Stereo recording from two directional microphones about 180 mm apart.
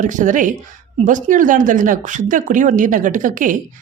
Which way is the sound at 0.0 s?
45° right (ahead or behind).